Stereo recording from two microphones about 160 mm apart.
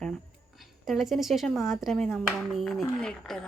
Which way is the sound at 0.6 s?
Centre (ahead or behind).